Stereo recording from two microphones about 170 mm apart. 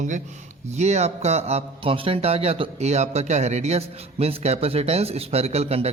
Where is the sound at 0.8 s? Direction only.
40° right (ahead or behind).